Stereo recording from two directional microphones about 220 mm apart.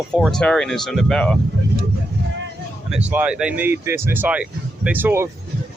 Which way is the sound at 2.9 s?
5° right (ahead or behind).